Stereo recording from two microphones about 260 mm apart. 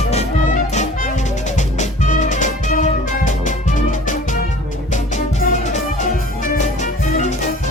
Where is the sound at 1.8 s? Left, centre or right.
Left.